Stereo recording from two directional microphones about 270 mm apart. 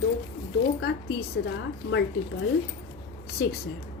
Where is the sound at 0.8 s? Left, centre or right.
Left.